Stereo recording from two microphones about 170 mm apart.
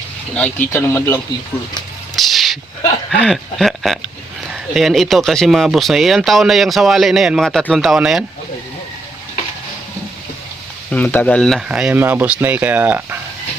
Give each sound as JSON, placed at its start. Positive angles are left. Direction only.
{"t": 0.3, "sound": "speech", "side_deg": 10}
{"t": 2.1, "sound": "a sound", "side_deg": 0}
{"t": 3.1, "sound": "speech", "side_deg": 5}
{"t": 10.9, "sound": "speech", "side_deg": 10}